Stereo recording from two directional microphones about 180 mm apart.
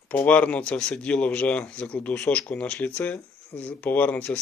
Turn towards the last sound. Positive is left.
turn(degrees=10)  # may be behind; listen again after turning